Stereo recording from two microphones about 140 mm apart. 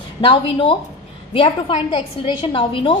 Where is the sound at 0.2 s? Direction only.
35° left (ahead or behind).